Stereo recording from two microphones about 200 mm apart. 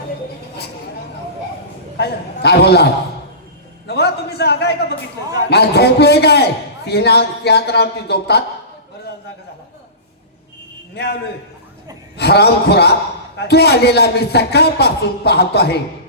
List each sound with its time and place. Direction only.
2.0 s a man's voice: 55° left (ahead or behind)
3.8 s a sound: 55° left (ahead or behind)
5.5 s a man's voice: 55° left (ahead or behind)
12.1 s a man's voice: 55° left (ahead or behind)